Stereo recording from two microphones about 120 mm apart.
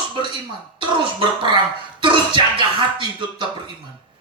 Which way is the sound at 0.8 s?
40° right (ahead or behind).